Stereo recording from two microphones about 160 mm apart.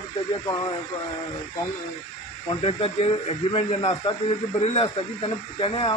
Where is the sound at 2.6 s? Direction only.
35° left (ahead or behind).